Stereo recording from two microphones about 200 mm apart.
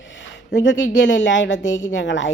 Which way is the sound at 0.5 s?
65° left (ahead or behind).